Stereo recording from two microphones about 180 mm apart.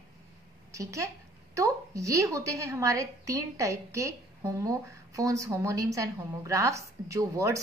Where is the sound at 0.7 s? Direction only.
15° right (ahead or behind).